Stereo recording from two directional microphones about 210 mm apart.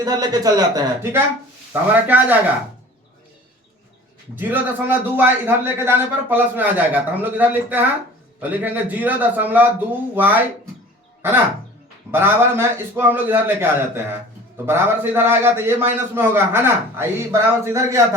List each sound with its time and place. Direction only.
0.0 s a man's voice: 20° right (ahead or behind)
4.4 s a man's voice: 10° right (ahead or behind)